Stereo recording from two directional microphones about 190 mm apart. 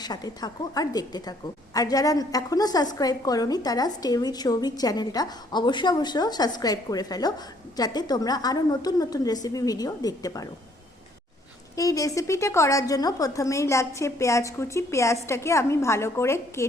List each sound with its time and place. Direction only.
0.0 s a woman's voice: 20° left (ahead or behind)
11.8 s a woman's voice: 15° left (ahead or behind)